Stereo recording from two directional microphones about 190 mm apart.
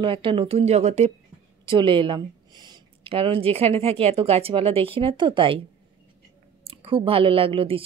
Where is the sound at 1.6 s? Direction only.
25° right (ahead or behind).